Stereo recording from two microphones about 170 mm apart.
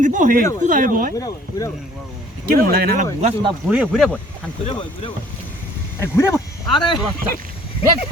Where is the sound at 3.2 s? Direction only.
35° right (ahead or behind).